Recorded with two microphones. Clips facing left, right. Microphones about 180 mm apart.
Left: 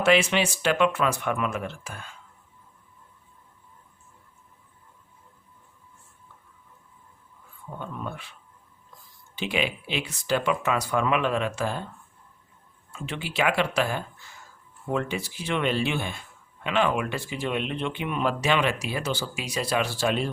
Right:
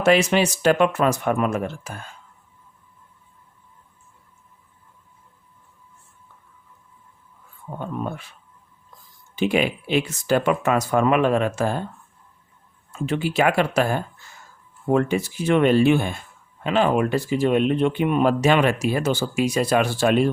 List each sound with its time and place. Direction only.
0.0 s speech: 40° right (ahead or behind)
7.8 s a sound: 45° right (ahead or behind)
9.3 s speech: 45° right (ahead or behind)
12.9 s speech: 45° right (ahead or behind)